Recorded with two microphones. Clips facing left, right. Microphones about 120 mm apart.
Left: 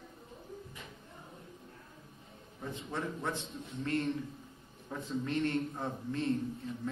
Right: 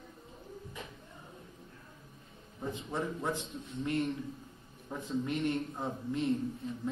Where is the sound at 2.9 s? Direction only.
15° right (ahead or behind).